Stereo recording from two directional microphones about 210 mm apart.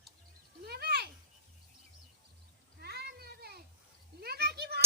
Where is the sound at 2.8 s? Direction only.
50° right (ahead or behind).